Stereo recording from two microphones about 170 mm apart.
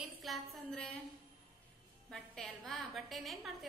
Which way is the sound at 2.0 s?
Centre (ahead or behind).